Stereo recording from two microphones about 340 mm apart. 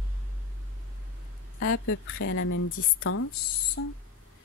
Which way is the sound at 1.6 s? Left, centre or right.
Left.